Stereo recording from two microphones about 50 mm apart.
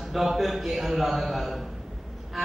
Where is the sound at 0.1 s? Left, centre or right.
Centre.